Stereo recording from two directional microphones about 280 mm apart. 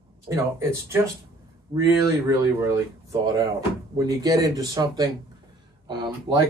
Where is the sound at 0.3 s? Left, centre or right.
Centre.